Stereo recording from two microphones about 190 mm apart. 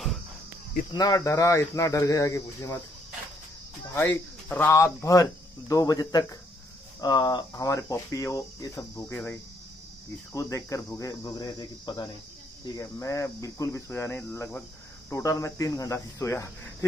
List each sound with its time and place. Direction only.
0.9 s speech: 20° left (ahead or behind)
3.9 s speech: 10° left (ahead or behind)
10.3 s cricket: 15° left (ahead or behind)
12.7 s speech: 15° left (ahead or behind)